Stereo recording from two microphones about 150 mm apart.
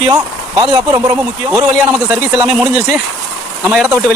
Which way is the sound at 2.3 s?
5° right (ahead or behind).